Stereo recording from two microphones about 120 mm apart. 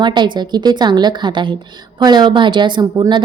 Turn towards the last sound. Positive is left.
turn(degrees=-35)  # may be behind; listen again after turning